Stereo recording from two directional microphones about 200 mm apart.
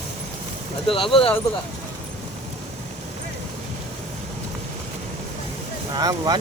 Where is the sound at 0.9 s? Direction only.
25° left (ahead or behind).